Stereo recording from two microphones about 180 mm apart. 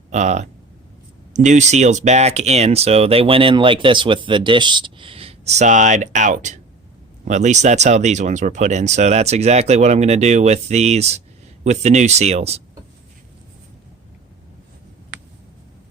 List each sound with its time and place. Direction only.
0.1 s speech: 40° right (ahead or behind)